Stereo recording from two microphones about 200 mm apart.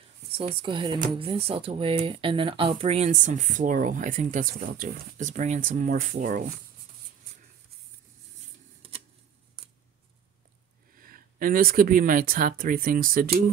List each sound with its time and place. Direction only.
0.6 s speech: 25° right (ahead or behind); by 6.5 s 40° right (ahead or behind)
8.8 s a sound: 30° right (ahead or behind)
11.0 s speech: 45° right (ahead or behind)